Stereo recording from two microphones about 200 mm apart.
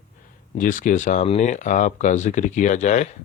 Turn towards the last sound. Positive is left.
turn(degrees=35)  # may be behind; listen again after turning